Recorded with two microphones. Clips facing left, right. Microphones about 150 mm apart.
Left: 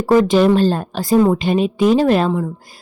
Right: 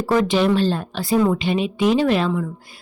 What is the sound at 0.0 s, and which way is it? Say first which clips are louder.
A woman's voice: left 5 dB; 45° left (ahead or behind).